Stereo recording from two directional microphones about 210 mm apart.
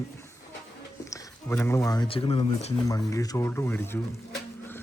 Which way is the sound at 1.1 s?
10° left (ahead or behind).